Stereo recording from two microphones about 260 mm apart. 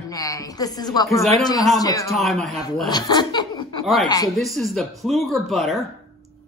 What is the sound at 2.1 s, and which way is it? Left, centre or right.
Speech, centre.